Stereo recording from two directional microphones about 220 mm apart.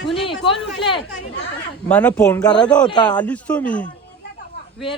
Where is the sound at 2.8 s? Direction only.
20° left (ahead or behind).